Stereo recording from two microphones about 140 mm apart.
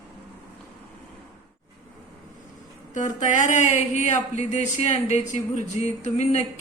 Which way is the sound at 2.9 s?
60° left (ahead or behind).